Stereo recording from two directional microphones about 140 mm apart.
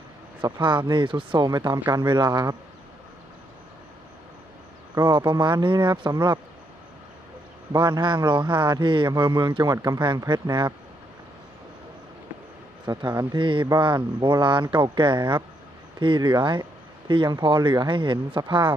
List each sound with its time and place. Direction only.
0.4 s speech: 35° right (ahead or behind)
4.9 s speech: 35° right (ahead or behind)
7.7 s speech: 30° right (ahead or behind)
12.8 s speech: 30° right (ahead or behind)